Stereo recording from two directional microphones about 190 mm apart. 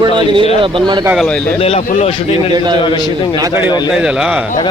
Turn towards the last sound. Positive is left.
turn(degrees=-5)  # may be behind; listen again after turning